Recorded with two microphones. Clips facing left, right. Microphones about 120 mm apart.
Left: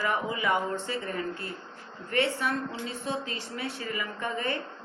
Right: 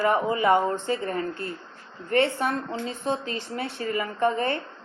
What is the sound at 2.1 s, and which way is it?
Speech, 45° right (ahead or behind).